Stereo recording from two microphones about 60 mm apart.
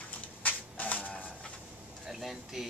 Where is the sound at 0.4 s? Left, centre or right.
Left.